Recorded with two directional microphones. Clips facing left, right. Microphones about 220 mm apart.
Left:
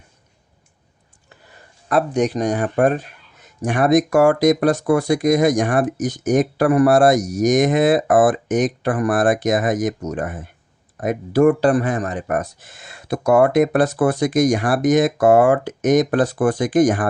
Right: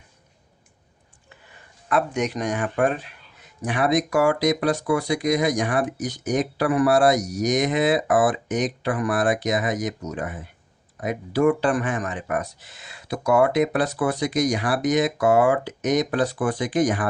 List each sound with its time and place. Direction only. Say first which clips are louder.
1.9 s speech: left 5 dB; 35° left (ahead or behind)